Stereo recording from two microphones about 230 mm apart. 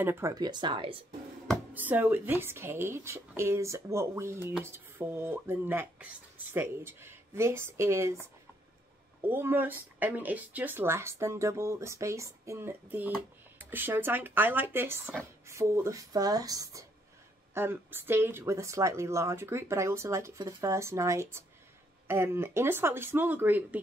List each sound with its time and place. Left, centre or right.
0.0 s speech: centre
1.5 s speech: centre
9.2 s speech: centre